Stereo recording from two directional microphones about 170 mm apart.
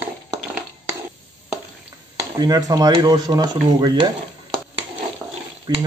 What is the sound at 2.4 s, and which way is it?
Speech, 25° right (ahead or behind).